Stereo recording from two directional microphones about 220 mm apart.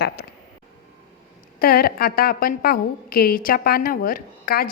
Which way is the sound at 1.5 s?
45° left (ahead or behind).